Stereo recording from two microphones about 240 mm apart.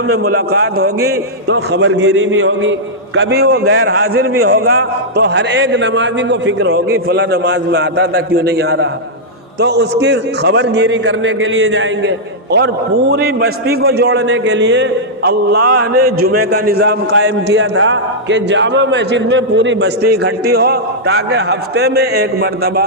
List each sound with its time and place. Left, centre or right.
0.1 s a man's voice: right
1.0 s a man's voice: right
3.8 s a man's voice: right
4.4 s a man's voice: right